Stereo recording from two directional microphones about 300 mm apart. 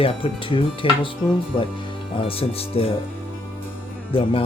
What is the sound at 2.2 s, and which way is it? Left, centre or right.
Speech, centre.